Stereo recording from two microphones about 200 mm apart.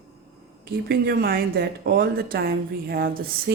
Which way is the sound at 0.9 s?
50° right (ahead or behind).